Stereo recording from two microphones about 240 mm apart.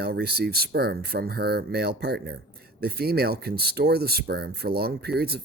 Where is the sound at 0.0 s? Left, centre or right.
Right.